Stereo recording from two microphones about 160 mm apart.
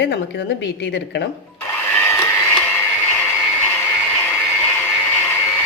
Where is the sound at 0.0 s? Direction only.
90° left.